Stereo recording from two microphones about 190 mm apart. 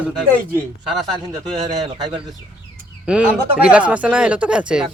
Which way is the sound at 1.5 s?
25° right (ahead or behind).